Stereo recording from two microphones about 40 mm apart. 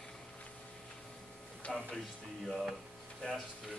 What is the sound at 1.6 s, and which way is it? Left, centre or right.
Speech, left.